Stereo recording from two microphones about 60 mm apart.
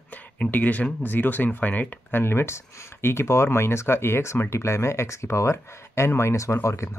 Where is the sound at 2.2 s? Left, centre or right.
Left.